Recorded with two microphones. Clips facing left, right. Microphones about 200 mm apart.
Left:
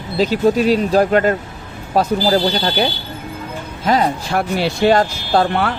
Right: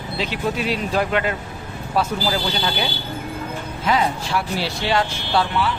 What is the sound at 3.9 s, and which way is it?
Speech, 45° left (ahead or behind).